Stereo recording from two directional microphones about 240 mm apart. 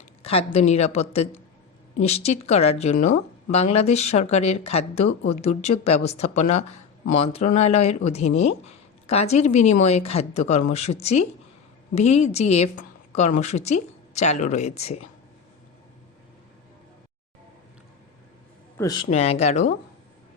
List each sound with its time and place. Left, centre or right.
0.2 s a woman's voice: left
18.8 s speech: centre